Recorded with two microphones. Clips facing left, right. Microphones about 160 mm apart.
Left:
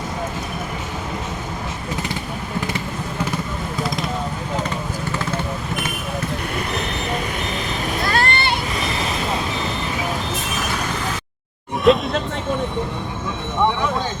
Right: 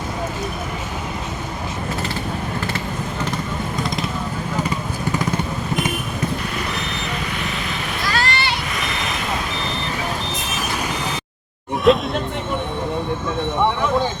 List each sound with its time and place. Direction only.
8.0 s vehicle: 55° left (ahead or behind)
11.9 s music: centre (ahead or behind)